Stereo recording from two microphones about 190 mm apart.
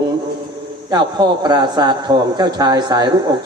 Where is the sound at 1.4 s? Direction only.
20° right (ahead or behind).